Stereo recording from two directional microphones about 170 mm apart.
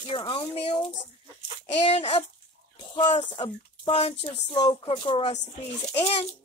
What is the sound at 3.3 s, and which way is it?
Speech, 30° left (ahead or behind).